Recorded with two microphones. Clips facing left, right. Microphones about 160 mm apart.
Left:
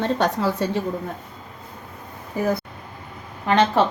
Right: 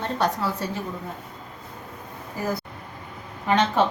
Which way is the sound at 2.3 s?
65° left (ahead or behind).